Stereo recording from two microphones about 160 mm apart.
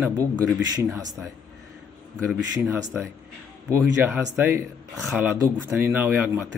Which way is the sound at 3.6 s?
15° right (ahead or behind).